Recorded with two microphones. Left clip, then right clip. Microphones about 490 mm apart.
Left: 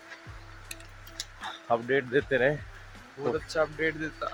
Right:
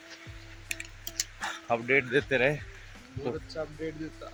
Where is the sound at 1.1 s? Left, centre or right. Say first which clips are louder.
Right 4 dB; right.